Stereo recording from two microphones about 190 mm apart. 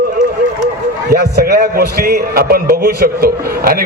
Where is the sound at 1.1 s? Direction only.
55° right (ahead or behind).